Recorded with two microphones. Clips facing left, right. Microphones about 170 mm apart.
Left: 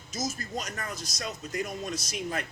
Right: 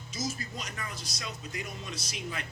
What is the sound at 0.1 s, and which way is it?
A man's voice, 45° left (ahead or behind).